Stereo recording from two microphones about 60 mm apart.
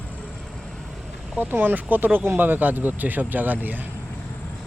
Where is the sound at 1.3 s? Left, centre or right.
Right.